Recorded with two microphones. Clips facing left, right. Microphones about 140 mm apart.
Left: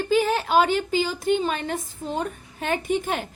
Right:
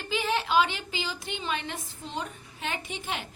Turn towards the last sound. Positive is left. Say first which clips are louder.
# left 10 dB
turn(degrees=50)  # may be behind; listen again after turning